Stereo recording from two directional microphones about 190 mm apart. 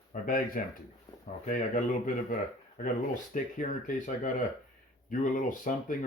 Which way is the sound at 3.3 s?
45° left (ahead or behind).